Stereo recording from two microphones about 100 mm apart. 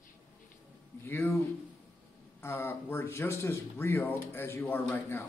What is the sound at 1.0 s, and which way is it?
Speech, 25° left (ahead or behind).